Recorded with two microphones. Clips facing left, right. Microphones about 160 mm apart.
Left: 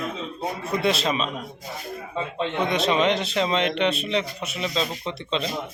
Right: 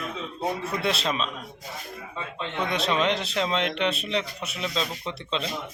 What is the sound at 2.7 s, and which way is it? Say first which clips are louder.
A man's voice: left 2 dB; centre (ahead or behind).